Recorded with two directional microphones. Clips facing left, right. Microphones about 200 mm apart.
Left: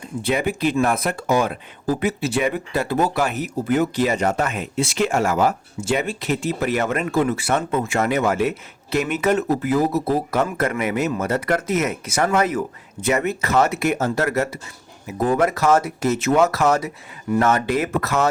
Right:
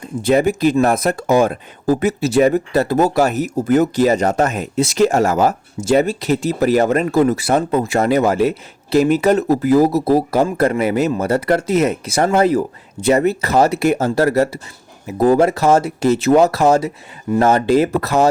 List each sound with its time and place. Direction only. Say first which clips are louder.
0.2 s speech: right 7 dB; 45° right (ahead or behind)